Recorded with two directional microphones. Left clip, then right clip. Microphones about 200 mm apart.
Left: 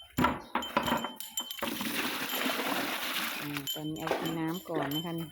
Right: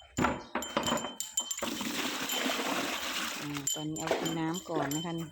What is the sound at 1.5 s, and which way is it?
Water, 15° left (ahead or behind).